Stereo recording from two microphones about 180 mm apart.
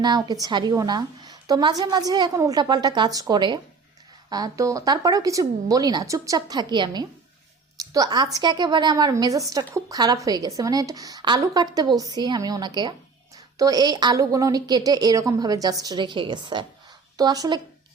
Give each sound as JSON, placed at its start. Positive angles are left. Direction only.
{"t": 0.0, "sound": "a woman's voice", "side_deg": -25}